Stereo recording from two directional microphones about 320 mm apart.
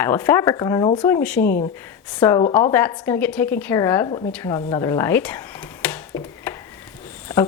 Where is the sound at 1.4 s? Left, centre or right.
Left.